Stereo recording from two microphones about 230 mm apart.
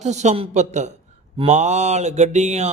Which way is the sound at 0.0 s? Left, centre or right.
Right.